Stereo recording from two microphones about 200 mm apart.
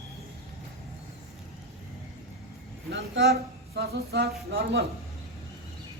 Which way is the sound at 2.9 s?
60° right (ahead or behind).